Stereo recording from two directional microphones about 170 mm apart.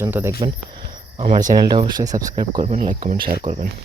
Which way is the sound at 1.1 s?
35° right (ahead or behind).